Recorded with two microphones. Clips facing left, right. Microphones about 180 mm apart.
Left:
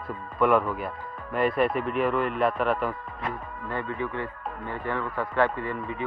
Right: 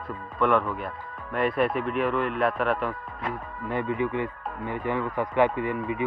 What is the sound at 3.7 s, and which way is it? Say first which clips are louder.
Speech: right 4 dB; 15° right (ahead or behind).